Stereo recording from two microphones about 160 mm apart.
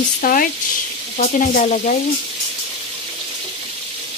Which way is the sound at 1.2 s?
50° left (ahead or behind).